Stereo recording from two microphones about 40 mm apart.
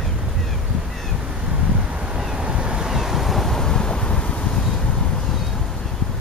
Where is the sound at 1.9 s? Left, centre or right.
Right.